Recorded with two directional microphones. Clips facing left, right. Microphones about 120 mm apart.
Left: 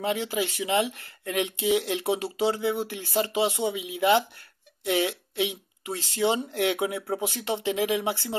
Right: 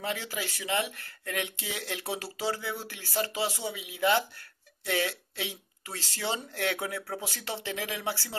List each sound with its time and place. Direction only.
0.0 s speech: 20° left (ahead or behind)